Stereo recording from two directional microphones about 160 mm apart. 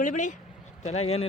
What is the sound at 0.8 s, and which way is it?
Speech, 40° left (ahead or behind).